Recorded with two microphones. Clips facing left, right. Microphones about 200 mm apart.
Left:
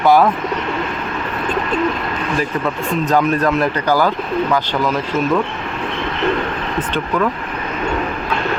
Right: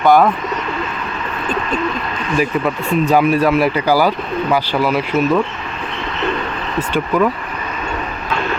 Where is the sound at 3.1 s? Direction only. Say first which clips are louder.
Right 2 dB; 10° right (ahead or behind).